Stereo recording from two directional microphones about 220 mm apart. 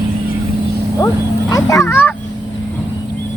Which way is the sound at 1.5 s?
15° left (ahead or behind).